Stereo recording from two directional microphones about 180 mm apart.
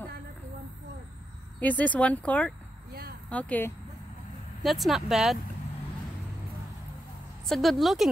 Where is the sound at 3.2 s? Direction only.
5° left (ahead or behind).